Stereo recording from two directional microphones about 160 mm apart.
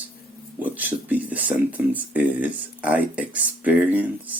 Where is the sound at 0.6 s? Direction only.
10° right (ahead or behind).